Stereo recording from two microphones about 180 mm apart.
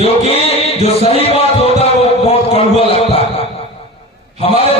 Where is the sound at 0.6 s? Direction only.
35° left (ahead or behind).